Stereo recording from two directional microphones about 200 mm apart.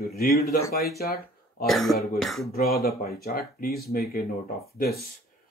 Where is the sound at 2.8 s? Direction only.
50° left (ahead or behind).